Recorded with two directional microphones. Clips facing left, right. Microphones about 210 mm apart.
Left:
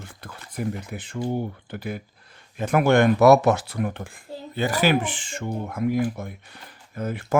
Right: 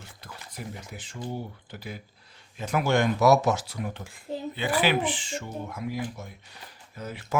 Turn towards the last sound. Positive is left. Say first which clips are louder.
# left 8 dB
turn(degrees=50)  # may be behind; listen again after turning